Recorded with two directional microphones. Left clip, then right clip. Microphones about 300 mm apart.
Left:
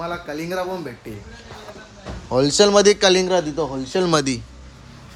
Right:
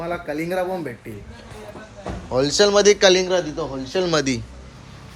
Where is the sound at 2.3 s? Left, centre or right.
Centre.